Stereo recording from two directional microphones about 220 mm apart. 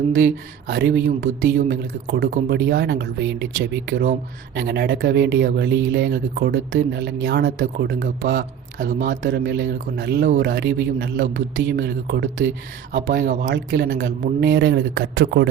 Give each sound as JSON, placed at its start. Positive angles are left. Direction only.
{"t": 0.7, "sound": "speech", "side_deg": -50}
{"t": 4.5, "sound": "speech", "side_deg": -50}
{"t": 9.2, "sound": "speech", "side_deg": -50}